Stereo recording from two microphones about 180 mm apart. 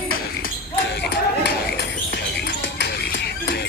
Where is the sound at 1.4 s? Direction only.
65° left (ahead or behind).